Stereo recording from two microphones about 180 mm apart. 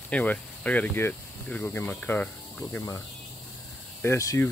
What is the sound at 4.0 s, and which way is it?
Speech, 15° left (ahead or behind).